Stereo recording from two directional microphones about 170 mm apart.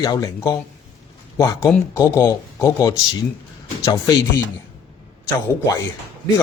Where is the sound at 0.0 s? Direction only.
20° left (ahead or behind).